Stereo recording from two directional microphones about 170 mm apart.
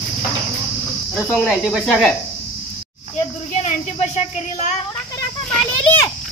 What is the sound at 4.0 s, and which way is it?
Speech, 40° left (ahead or behind).